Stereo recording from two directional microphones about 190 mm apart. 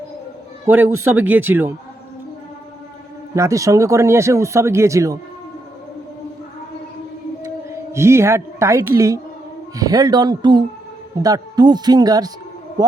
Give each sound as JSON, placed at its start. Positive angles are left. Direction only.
{"t": 0.7, "sound": "speech", "side_deg": -10}
{"t": 3.3, "sound": "speech", "side_deg": -15}
{"t": 7.4, "sound": "a woman's voice", "side_deg": -15}